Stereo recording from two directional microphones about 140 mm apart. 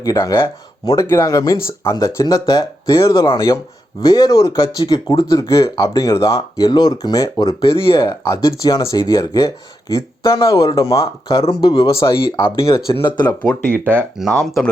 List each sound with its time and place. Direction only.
0.0 s speech: 25° left (ahead or behind)
13.1 s speech: 30° left (ahead or behind)
13.4 s speech: 5° left (ahead or behind)